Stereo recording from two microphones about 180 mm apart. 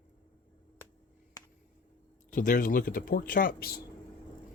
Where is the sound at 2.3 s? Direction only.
50° left (ahead or behind).